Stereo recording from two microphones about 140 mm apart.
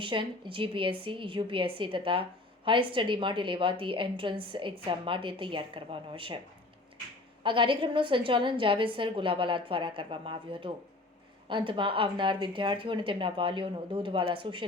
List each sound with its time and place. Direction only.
0.0 s a woman's voice: 35° right (ahead or behind)
7.4 s a woman's voice: 35° right (ahead or behind)